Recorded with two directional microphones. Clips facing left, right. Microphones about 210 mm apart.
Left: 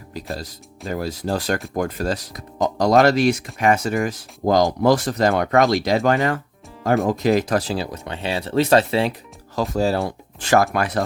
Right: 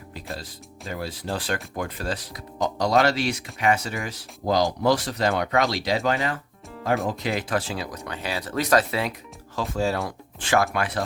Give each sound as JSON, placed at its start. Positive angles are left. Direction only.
{"t": 0.3, "sound": "speech", "side_deg": 40}